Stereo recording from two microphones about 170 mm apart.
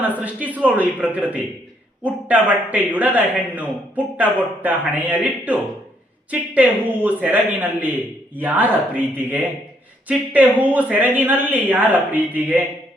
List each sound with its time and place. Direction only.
0.0 s a man's voice: 10° right (ahead or behind)